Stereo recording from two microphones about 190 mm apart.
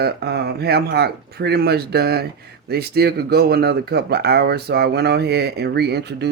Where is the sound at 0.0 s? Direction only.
55° right (ahead or behind).